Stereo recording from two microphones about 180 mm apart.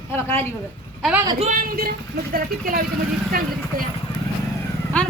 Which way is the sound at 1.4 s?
45° right (ahead or behind).